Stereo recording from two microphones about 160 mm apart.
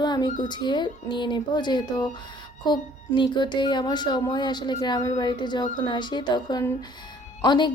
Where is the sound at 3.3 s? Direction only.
30° left (ahead or behind).